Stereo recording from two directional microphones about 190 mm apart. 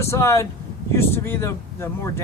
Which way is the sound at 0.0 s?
15° left (ahead or behind).